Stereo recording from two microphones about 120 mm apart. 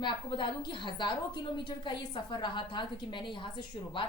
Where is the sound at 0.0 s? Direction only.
40° left (ahead or behind).